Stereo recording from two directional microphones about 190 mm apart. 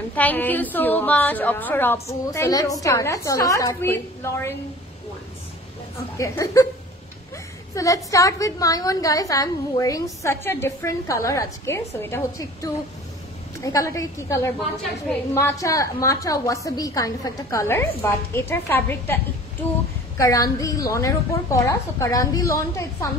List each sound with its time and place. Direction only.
0.1 s a woman's voice: 10° left (ahead or behind)
6.1 s a woman's voice: 15° left (ahead or behind)
7.7 s a woman's voice: 15° left (ahead or behind)
20.2 s a woman's voice: 15° left (ahead or behind)